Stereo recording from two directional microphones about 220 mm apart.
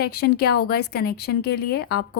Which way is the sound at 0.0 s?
45° left (ahead or behind).